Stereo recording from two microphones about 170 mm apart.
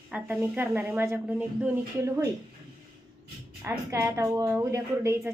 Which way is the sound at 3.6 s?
20° right (ahead or behind).